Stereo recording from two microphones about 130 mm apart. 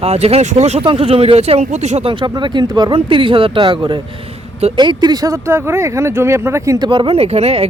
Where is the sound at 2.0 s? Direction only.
35° right (ahead or behind).